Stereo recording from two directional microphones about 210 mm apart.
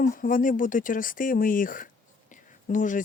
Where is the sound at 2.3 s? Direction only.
35° left (ahead or behind).